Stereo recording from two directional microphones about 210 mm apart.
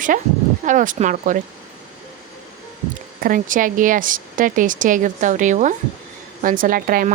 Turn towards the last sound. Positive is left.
turn(degrees=-40)  # may be behind; listen again after turning